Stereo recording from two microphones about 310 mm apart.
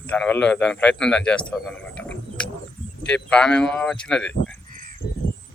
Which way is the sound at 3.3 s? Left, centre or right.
Centre.